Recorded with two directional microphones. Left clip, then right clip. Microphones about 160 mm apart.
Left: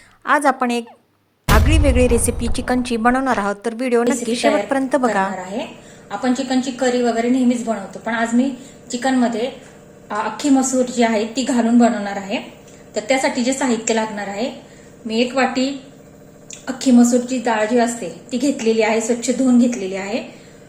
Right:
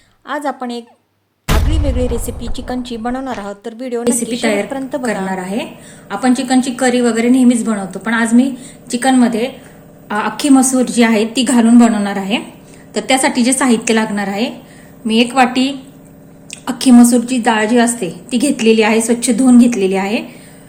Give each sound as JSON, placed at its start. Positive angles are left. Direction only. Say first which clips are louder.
{"t": 0.3, "sound": "a woman's voice", "louder": "left 5 dB", "side_deg": 20}
{"t": 6.1, "sound": "a woman's voice", "louder": "right 5 dB", "side_deg": -65}